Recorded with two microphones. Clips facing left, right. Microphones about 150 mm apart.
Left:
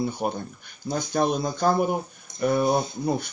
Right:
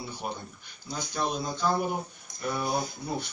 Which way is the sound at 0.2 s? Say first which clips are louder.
Left 8 dB; 55° left (ahead or behind).